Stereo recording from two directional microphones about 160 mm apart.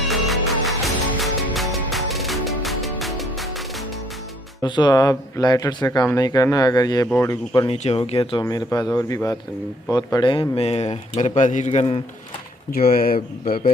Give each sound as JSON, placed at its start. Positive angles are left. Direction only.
{"t": 0.1, "sound": "music", "side_deg": 0}
{"t": 4.6, "sound": "speech", "side_deg": 30}
{"t": 8.0, "sound": "speech", "side_deg": 40}
{"t": 12.7, "sound": "speech", "side_deg": 65}